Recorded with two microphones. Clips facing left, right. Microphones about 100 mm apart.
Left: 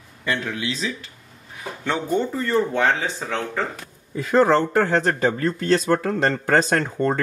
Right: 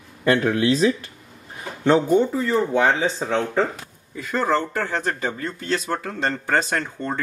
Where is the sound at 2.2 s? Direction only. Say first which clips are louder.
Right 1 dB; 5° right (ahead or behind).